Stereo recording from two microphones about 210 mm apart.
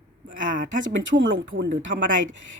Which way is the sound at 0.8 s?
65° right (ahead or behind).